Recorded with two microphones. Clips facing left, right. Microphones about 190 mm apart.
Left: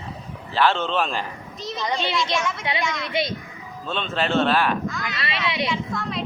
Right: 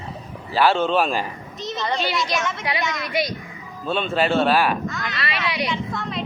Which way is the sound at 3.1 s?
25° left (ahead or behind).